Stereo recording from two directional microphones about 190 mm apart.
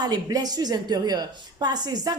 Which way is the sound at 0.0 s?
20° right (ahead or behind).